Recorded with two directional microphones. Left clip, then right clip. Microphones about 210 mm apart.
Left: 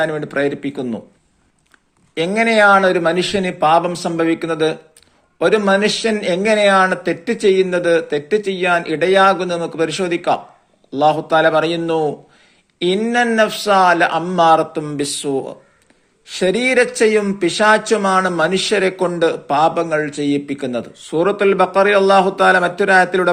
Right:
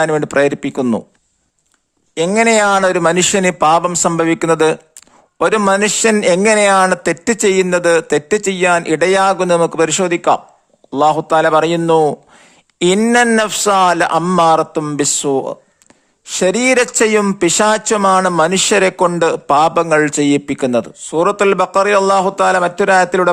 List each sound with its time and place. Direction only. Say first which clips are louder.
0.0 s speech: right 5 dB; 45° right (ahead or behind)
2.1 s speech: right 2 dB; 40° right (ahead or behind)
12.8 s speech: right 5 dB; 50° right (ahead or behind)